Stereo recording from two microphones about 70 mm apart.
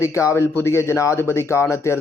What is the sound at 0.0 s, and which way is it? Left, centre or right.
A man's voice, left.